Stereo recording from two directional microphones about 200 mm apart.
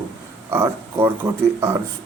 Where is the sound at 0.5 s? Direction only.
10° right (ahead or behind).